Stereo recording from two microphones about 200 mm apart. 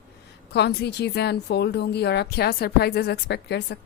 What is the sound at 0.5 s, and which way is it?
Speech, 55° left (ahead or behind).